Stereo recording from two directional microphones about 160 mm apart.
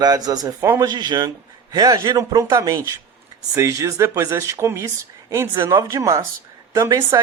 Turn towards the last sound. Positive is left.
turn(degrees=-20)  # may be behind; listen again after turning